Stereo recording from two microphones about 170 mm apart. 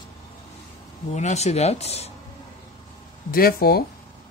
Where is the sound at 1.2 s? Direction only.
40° left (ahead or behind).